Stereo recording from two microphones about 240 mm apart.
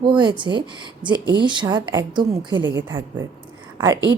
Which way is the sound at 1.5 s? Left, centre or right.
Centre.